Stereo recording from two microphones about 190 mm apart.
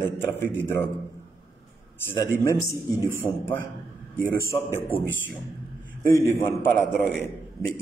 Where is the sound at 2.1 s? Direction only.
15° left (ahead or behind).